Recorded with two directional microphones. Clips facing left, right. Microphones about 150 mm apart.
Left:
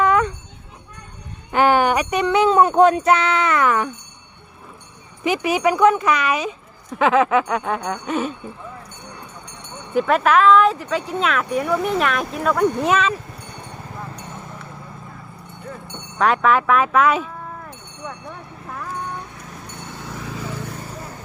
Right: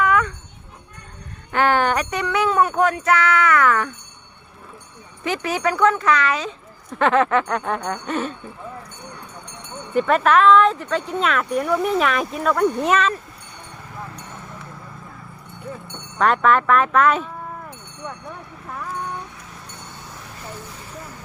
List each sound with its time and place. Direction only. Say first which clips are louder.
0.0 s jingle bell: left 2 dB; 30° left (ahead or behind)
1.5 s speech: left 2 dB; 15° left (ahead or behind)
5.2 s speech: left 4 dB; 15° left (ahead or behind)
7.0 s speech: left 1 dB; 5° left (ahead or behind)
9.9 s speech: even; centre (ahead or behind)
16.1 s speech: even; centre (ahead or behind)
18.3 s vehicle: even; centre (ahead or behind)
20.1 s a sound: left 8 dB; 90° left